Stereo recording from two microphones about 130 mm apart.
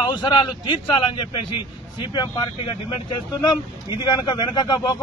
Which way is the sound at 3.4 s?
35° left (ahead or behind).